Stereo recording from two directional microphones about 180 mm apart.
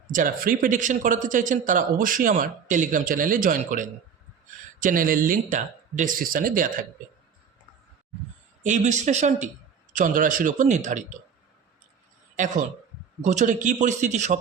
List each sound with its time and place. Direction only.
0.1 s speech: 45° right (ahead or behind)
8.6 s speech: 40° right (ahead or behind)
13.2 s speech: 45° right (ahead or behind)